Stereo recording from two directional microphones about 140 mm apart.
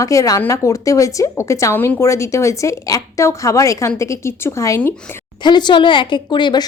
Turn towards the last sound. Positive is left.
turn(degrees=35)  # may be behind; listen again after turning